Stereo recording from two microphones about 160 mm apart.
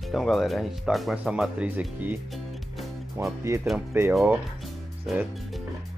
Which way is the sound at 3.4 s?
15° right (ahead or behind).